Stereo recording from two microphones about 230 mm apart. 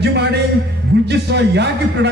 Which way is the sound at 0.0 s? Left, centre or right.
Right.